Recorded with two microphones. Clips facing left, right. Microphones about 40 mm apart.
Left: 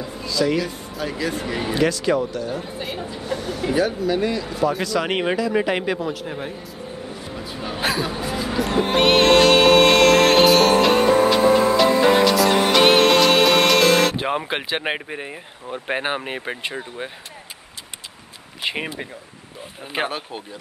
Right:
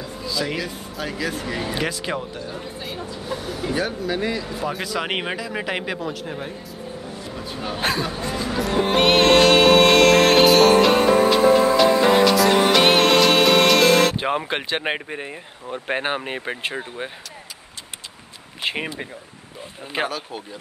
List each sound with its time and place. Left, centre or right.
0.3 s speech: centre
1.8 s speech: centre
2.4 s speech: centre
7.3 s music: centre
16.7 s speech: centre
18.6 s a sound: centre
20.1 s speech: left